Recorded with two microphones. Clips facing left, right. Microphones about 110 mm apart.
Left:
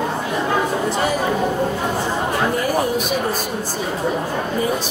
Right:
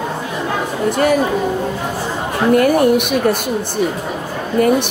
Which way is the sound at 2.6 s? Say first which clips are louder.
Right 7 dB; 65° right (ahead or behind).